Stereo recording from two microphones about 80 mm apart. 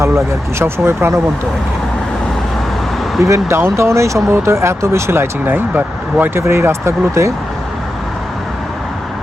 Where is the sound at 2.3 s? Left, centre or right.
Centre.